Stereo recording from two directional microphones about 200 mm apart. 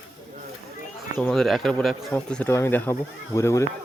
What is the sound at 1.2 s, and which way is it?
Speech, centre (ahead or behind).